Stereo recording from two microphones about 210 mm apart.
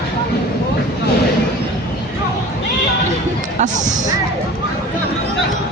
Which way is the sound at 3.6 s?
35° right (ahead or behind).